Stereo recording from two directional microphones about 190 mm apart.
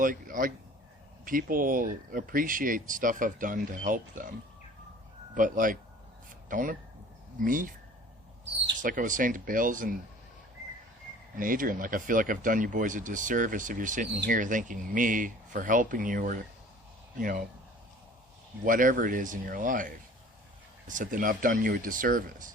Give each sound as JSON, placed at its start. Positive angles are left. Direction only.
{"t": 0.0, "sound": "speech", "side_deg": -45}
{"t": 8.8, "sound": "speech", "side_deg": -45}
{"t": 11.3, "sound": "speech", "side_deg": -45}
{"t": 18.6, "sound": "speech", "side_deg": -45}